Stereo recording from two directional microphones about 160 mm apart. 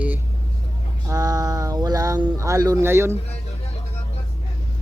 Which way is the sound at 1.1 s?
20° right (ahead or behind).